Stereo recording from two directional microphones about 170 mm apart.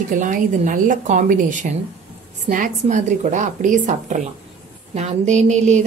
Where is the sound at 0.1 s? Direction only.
50° right (ahead or behind).